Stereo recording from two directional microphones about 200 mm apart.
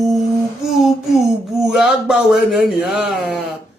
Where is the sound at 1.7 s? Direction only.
Centre (ahead or behind).